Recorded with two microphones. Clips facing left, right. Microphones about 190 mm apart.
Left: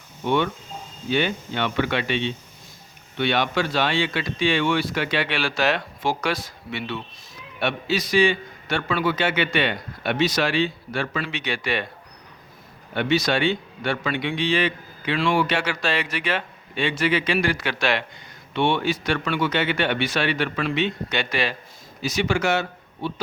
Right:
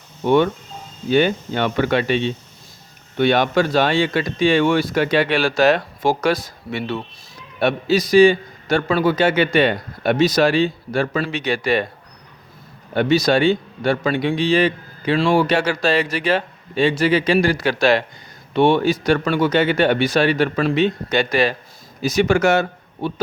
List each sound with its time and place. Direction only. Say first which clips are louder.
0.3 s a man's voice: right 7 dB; 45° right (ahead or behind)
12.9 s a man's voice: right 6 dB; 40° right (ahead or behind)